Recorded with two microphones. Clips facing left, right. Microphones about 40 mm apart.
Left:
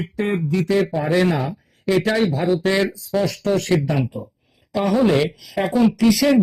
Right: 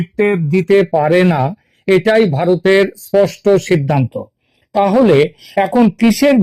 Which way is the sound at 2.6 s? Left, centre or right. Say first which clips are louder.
Right 8 dB; right.